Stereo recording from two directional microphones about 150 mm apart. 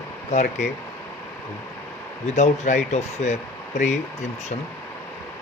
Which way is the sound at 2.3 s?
50° left (ahead or behind).